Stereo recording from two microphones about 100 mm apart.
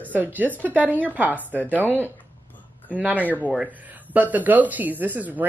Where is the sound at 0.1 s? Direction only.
15° right (ahead or behind).